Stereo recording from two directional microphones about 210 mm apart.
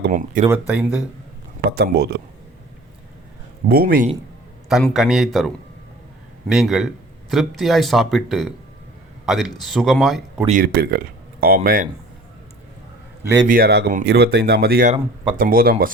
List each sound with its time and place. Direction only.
0.0 s speech: 40° right (ahead or behind)
0.7 s speech: 5° right (ahead or behind)
1.7 s speech: 50° right (ahead or behind)
3.7 s speech: 45° right (ahead or behind)
4.7 s speech: centre (ahead or behind)
6.5 s speech: centre (ahead or behind)
10.4 s speech: 40° right (ahead or behind)
13.2 s a man's voice: 20° right (ahead or behind)
13.5 s speech: 50° right (ahead or behind)
14.9 s speech: 25° right (ahead or behind)
15.4 s speech: 45° right (ahead or behind)